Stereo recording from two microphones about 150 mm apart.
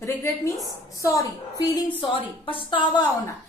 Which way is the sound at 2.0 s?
35° left (ahead or behind).